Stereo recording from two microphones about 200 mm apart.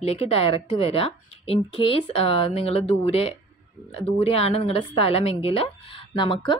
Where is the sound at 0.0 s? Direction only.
30° left (ahead or behind).